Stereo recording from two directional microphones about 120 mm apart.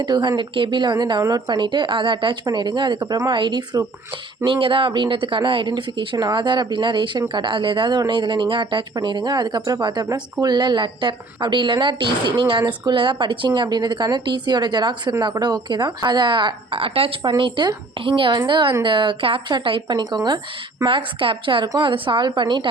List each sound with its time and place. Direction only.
0.0 s a woman's voice: 40° right (ahead or behind)
20.8 s a woman's voice: 45° right (ahead or behind)